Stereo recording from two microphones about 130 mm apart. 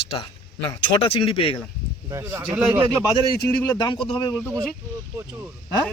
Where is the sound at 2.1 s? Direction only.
20° right (ahead or behind).